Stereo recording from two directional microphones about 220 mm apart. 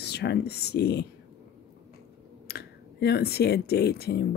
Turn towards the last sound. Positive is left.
turn(degrees=45)  # may be behind; listen again after turning